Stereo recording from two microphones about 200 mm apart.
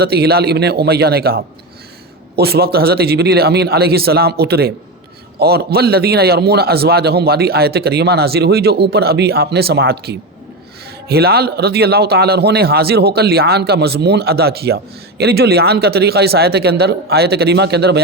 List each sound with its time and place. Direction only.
0.0 s a man's voice: 55° right (ahead or behind)